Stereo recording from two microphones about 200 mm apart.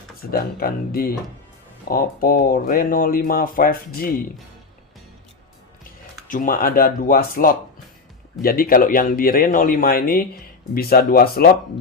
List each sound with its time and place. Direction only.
0.3 s speech: 50° left (ahead or behind)
6.2 s speech: 40° left (ahead or behind)